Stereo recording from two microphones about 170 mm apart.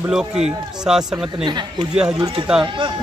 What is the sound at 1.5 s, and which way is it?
Speech, 25° right (ahead or behind).